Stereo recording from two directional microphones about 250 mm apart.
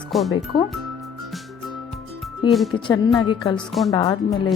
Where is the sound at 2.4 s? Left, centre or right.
Centre.